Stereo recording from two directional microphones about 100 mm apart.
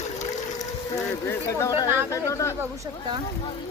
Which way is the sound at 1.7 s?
35° left (ahead or behind).